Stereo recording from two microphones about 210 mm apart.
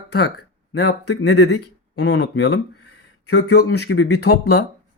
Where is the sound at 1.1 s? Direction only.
80° left.